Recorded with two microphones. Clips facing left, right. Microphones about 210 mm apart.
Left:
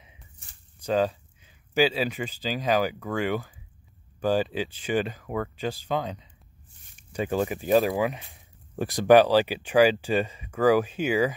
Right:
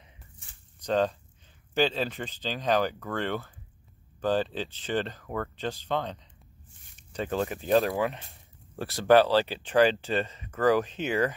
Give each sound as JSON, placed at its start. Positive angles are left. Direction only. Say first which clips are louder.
{"t": 0.8, "sound": "speech", "louder": "left 2 dB", "side_deg": 10}